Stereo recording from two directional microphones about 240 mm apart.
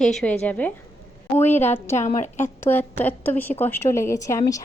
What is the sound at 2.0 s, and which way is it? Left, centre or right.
Speech, left.